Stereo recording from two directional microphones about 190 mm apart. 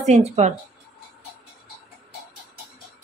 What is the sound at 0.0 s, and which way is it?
Speech, 35° right (ahead or behind).